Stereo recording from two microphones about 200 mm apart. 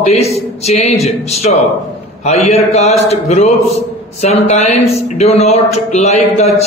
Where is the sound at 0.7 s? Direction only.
30° left (ahead or behind).